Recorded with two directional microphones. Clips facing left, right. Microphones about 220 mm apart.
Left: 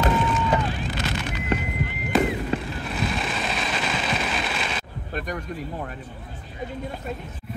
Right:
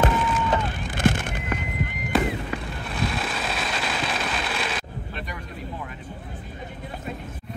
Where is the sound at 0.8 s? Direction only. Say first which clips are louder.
Right 5 dB; 50° right (ahead or behind).